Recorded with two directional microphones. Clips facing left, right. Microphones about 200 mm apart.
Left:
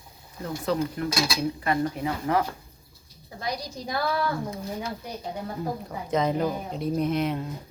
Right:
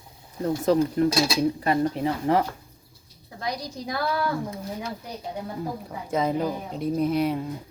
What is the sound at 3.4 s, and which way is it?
Speech, centre (ahead or behind).